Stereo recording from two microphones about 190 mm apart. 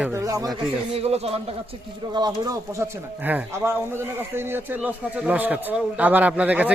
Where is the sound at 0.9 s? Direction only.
35° right (ahead or behind).